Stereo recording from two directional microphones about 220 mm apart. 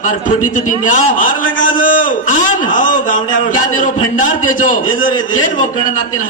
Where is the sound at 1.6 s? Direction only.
35° left (ahead or behind).